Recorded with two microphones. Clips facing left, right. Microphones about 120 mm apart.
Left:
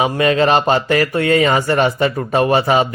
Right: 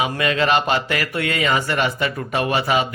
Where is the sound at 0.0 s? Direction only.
35° left (ahead or behind).